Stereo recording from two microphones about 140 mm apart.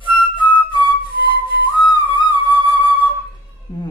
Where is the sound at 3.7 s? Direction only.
30° left (ahead or behind).